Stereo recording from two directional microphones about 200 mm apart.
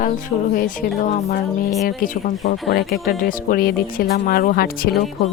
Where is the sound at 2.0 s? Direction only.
40° left (ahead or behind).